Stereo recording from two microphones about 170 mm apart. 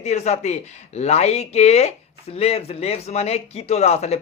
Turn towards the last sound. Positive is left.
turn(degrees=40)  # may be behind; listen again after turning